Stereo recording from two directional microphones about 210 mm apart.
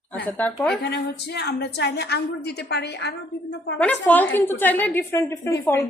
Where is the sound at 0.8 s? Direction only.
50° left (ahead or behind).